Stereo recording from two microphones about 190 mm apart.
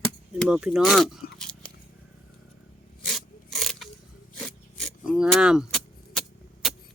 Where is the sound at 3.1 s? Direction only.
Centre (ahead or behind).